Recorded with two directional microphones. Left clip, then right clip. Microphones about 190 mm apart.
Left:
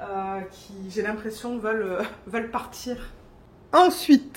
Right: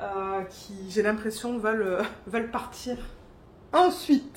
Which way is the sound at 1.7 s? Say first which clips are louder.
Left 2 dB; 15° right (ahead or behind).